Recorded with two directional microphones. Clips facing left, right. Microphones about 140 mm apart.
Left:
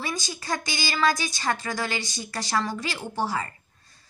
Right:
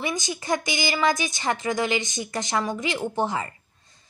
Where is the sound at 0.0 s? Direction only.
20° right (ahead or behind).